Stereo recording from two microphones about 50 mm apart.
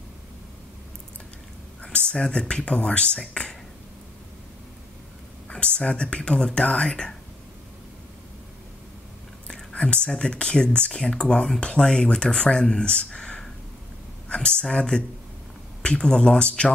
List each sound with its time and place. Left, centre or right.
1.8 s speech: left
5.5 s speech: centre
9.5 s speech: centre